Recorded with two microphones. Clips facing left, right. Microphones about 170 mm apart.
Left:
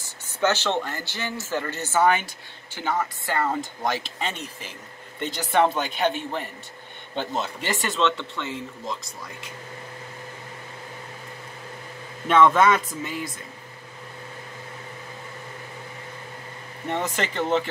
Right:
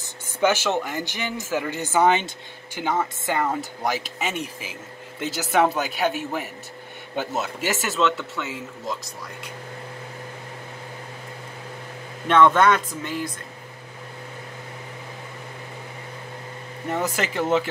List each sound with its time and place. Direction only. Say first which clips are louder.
0.0 s speech: right 3 dB; 10° right (ahead or behind)
12.3 s speech: right 1 dB; 5° left (ahead or behind)
16.9 s speech: right 2 dB; 5° right (ahead or behind)